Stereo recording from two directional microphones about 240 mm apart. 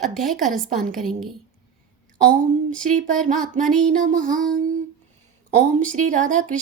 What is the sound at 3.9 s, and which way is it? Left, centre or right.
Music, right.